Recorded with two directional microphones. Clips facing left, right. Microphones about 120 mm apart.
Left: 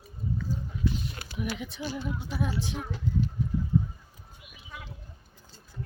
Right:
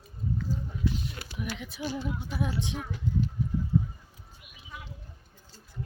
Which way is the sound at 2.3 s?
15° right (ahead or behind).